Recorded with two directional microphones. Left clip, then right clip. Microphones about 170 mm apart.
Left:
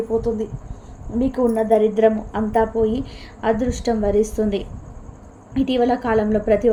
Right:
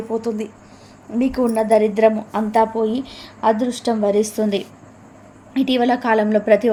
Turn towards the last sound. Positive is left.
turn(degrees=-15)  # may be behind; listen again after turning